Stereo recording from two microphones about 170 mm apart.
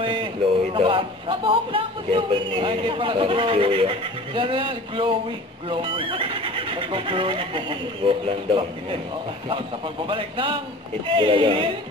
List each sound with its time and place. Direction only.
0.0 s a sound: 30° right (ahead or behind)
0.7 s a man's voice: 30° right (ahead or behind)
10.0 s a man's voice: 30° right (ahead or behind)